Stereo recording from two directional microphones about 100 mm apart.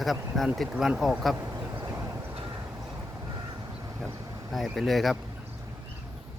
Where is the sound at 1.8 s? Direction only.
30° right (ahead or behind).